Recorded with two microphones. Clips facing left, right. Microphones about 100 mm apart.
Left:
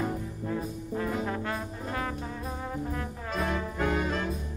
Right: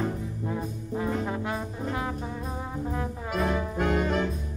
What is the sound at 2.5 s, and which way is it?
Brass instrument, 15° right (ahead or behind).